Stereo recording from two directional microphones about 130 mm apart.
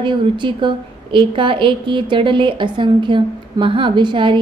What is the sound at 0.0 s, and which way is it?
A woman's voice, 35° right (ahead or behind).